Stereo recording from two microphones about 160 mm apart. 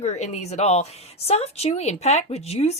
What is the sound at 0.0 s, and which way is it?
Speech, 45° left (ahead or behind).